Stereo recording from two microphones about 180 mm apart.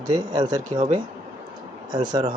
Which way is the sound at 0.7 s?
35° right (ahead or behind).